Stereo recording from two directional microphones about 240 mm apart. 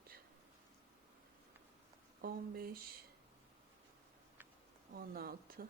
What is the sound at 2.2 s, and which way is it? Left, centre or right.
Speech, right.